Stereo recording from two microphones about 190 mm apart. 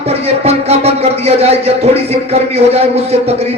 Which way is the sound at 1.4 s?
35° right (ahead or behind).